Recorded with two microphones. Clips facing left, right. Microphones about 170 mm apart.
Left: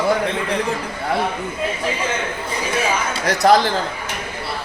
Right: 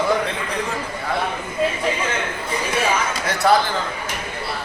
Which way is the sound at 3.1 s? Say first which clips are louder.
Left 6 dB; 40° left (ahead or behind).